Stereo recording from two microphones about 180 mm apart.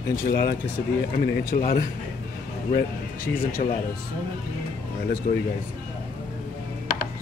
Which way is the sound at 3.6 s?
35° left (ahead or behind).